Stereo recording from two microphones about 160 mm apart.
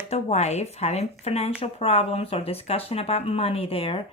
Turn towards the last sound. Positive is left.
turn(degrees=35)  # may be behind; listen again after turning